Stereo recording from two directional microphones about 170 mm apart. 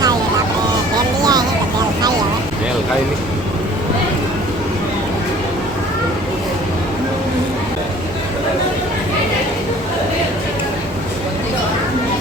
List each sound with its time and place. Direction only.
0.9 s vehicle: 25° right (ahead or behind)